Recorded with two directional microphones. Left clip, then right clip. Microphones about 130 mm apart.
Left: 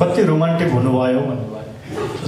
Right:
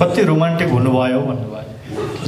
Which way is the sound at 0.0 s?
25° right (ahead or behind).